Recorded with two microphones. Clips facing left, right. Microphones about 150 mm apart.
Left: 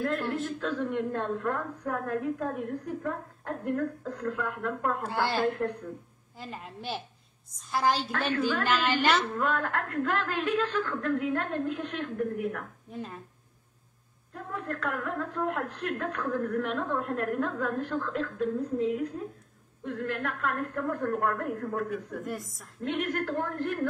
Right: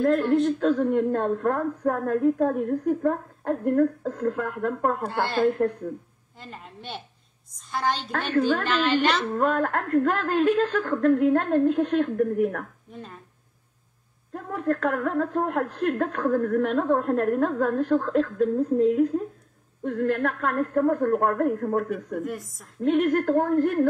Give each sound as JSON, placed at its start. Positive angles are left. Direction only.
{"t": 0.0, "sound": "a woman's voice", "side_deg": -45}
{"t": 5.6, "sound": "a woman's voice", "side_deg": -35}
{"t": 6.3, "sound": "a woman's voice", "side_deg": 0}
{"t": 8.1, "sound": "a woman's voice", "side_deg": -50}
{"t": 8.6, "sound": "a woman's voice", "side_deg": 5}
{"t": 9.3, "sound": "a woman's voice", "side_deg": -45}
{"t": 14.3, "sound": "a woman's voice", "side_deg": -45}
{"t": 22.2, "sound": "a woman's voice", "side_deg": 0}
{"t": 22.8, "sound": "a woman's voice", "side_deg": -45}